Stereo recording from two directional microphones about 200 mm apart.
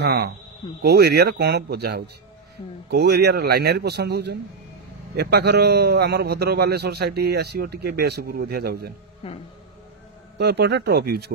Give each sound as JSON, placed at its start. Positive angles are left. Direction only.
{"t": 0.0, "sound": "a man's voice", "side_deg": -50}
{"t": 9.2, "sound": "speech", "side_deg": 30}
{"t": 10.3, "sound": "a man's voice", "side_deg": -55}